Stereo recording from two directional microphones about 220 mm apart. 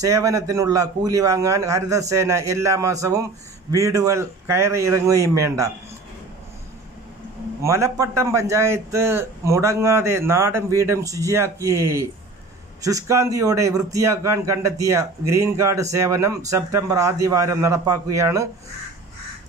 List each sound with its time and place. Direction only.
0.0 s speech: 15° right (ahead or behind)
7.6 s speech: 15° right (ahead or behind)